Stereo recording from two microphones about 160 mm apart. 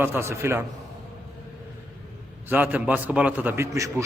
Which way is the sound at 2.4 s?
10° right (ahead or behind).